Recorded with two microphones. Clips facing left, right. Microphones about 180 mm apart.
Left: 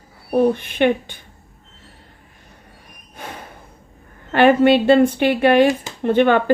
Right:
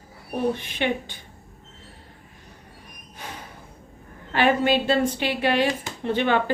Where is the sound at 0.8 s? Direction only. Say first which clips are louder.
Left 9 dB; 55° left (ahead or behind).